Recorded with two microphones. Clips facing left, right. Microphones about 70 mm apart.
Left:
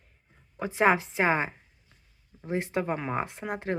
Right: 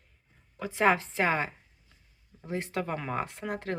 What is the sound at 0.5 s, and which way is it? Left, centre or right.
Speech, left.